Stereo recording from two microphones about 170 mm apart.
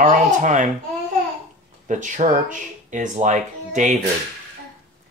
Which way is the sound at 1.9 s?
45° right (ahead or behind).